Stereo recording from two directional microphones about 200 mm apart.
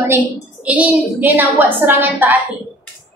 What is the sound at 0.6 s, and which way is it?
A woman's voice, 5° right (ahead or behind).